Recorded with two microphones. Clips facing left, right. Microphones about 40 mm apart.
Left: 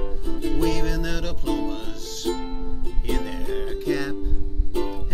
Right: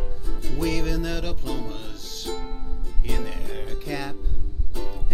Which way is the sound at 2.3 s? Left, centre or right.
Left.